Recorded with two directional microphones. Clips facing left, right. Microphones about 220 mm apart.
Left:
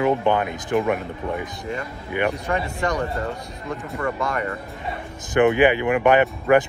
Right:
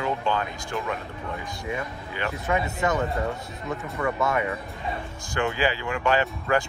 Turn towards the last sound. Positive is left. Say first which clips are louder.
# left 7 dB
turn(degrees=20)  # may be behind; listen again after turning